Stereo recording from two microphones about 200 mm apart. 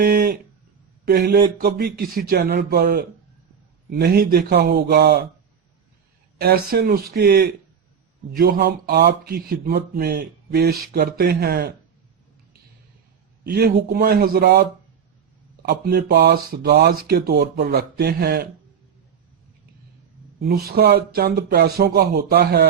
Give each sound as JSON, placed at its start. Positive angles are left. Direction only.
{"t": 0.0, "sound": "a sound", "side_deg": -50}
{"t": 1.0, "sound": "speech", "side_deg": -50}
{"t": 6.4, "sound": "speech", "side_deg": -50}
{"t": 13.4, "sound": "a man's voice", "side_deg": -50}
{"t": 20.4, "sound": "speech", "side_deg": -50}